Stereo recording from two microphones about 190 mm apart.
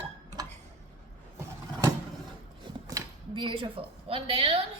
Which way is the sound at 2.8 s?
20° right (ahead or behind).